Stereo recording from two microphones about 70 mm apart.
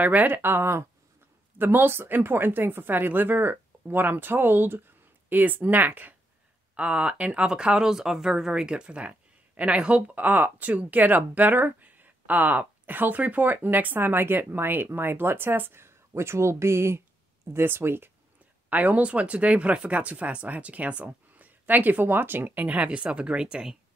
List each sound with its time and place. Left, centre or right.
0.0 s speech: right
18.7 s speech: right